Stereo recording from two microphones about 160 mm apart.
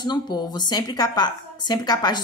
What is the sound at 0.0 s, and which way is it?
A woman's voice, 25° left (ahead or behind).